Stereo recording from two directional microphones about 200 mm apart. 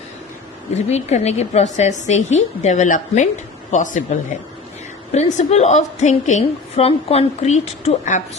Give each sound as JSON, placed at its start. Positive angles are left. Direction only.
{"t": 0.9, "sound": "a woman's voice", "side_deg": 35}